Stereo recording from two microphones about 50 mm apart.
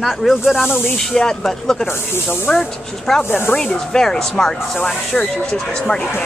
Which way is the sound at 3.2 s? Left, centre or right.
Left.